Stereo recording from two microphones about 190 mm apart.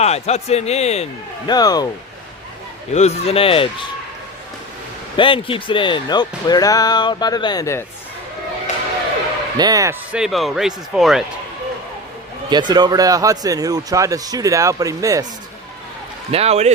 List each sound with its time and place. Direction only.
0.0 s a man's voice: 35° left (ahead or behind)
1.5 s speech: 20° left (ahead or behind)
2.9 s a man's voice: 35° left (ahead or behind)
5.1 s speech: 25° left (ahead or behind)
9.6 s speech: 20° right (ahead or behind)
10.1 s speech: 5° right (ahead or behind)
12.5 s speech: 20° right (ahead or behind)
16.3 s speech: 35° right (ahead or behind)